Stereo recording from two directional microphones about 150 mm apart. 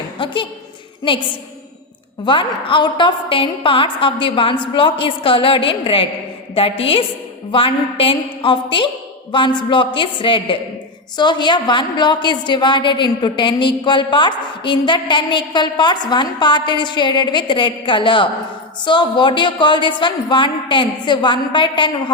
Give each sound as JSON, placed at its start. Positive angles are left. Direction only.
{"t": 2.2, "sound": "a woman's voice", "side_deg": 35}